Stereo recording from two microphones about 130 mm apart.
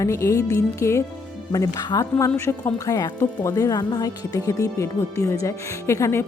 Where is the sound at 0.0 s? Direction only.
25° left (ahead or behind).